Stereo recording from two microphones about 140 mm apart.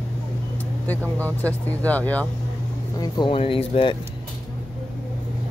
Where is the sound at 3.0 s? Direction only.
30° left (ahead or behind).